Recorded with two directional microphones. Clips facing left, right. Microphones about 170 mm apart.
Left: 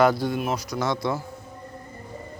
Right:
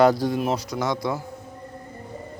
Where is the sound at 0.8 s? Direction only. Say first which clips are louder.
Even; 15° right (ahead or behind).